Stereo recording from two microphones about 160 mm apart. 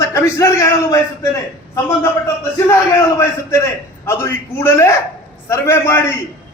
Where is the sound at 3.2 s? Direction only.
15° left (ahead or behind).